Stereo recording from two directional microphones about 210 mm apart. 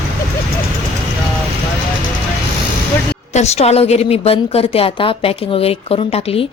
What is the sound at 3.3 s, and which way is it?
A woman's voice, 30° left (ahead or behind).